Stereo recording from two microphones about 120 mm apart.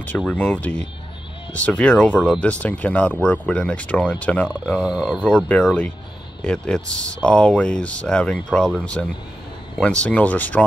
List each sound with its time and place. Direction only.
0.3 s speech: 10° left (ahead or behind)
4.7 s speech: 5° right (ahead or behind)
5.3 s speech: 10° left (ahead or behind)